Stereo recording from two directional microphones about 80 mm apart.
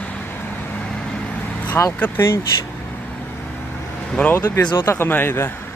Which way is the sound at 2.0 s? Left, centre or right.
Left.